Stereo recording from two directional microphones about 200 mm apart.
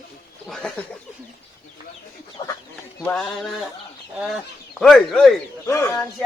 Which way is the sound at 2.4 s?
25° left (ahead or behind).